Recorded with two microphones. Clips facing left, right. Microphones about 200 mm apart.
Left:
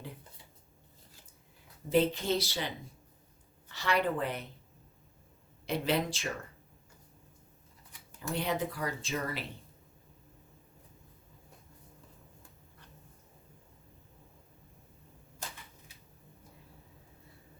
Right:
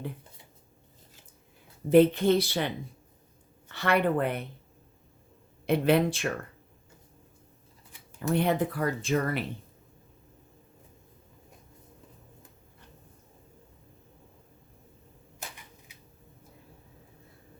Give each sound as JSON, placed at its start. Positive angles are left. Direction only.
{"t": 1.9, "sound": "speech", "side_deg": -60}
{"t": 5.6, "sound": "speech", "side_deg": -55}
{"t": 8.3, "sound": "speech", "side_deg": -55}